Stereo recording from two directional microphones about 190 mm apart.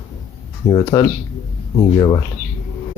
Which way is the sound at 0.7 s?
15° left (ahead or behind).